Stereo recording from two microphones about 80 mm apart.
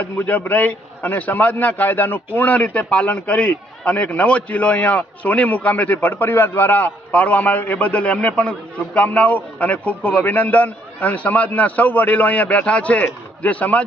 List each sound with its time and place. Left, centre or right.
0.0 s a man's voice: left